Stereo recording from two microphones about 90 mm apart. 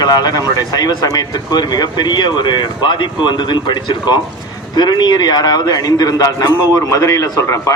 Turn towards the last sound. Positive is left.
turn(degrees=40)  # may be behind; listen again after turning